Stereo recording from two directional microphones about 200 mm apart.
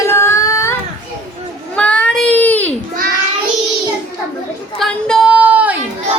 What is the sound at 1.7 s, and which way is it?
Child singing, 5° left (ahead or behind).